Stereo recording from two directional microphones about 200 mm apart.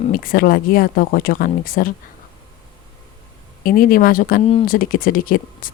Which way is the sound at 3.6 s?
45° left (ahead or behind).